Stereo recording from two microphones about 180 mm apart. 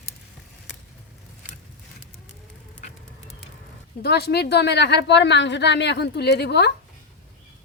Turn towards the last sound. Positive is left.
turn(degrees=70)  # may be behind; listen again after turning